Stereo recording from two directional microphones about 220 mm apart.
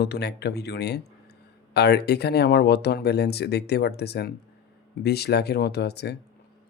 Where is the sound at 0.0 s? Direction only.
50° left (ahead or behind).